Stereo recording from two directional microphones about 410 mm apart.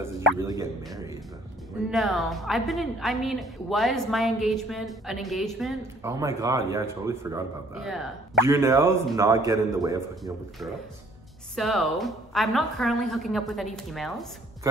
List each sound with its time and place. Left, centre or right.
0.0 s a woman's voice: centre